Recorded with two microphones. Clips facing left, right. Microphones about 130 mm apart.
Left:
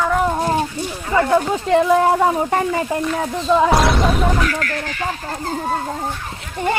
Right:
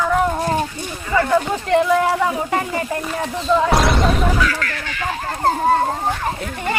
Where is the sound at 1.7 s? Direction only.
25° left (ahead or behind).